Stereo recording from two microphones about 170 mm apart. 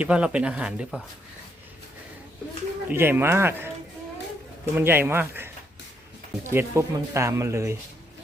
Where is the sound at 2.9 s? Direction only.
10° right (ahead or behind).